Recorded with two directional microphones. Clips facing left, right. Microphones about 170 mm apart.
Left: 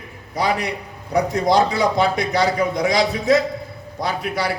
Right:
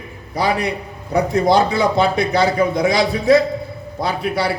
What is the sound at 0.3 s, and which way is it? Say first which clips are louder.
A man's voice: right 2 dB; 30° right (ahead or behind).